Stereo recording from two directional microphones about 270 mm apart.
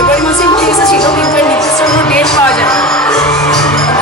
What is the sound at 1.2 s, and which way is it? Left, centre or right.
Speech, centre.